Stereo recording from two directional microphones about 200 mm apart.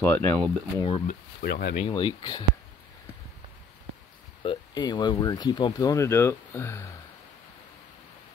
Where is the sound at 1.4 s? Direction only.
55° left (ahead or behind).